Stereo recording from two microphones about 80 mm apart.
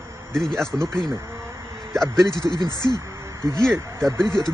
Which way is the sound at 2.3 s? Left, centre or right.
Left.